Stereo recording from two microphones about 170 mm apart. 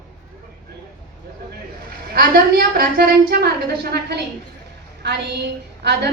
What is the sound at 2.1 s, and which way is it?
A woman's voice, 65° right (ahead or behind).